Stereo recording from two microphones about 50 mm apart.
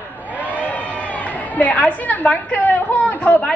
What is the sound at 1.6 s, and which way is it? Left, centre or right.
A woman's voice, left.